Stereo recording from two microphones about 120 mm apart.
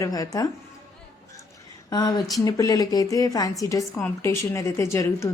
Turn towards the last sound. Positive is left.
turn(degrees=25)  # may be behind; listen again after turning